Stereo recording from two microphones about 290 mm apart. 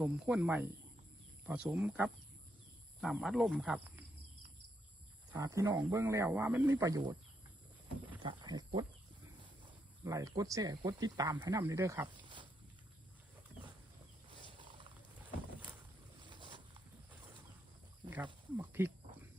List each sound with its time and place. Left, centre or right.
0.0 s speech: centre
5.3 s speech: centre
8.2 s speech: centre
10.0 s speech: centre
16.2 s a sound: centre
18.5 s speech: centre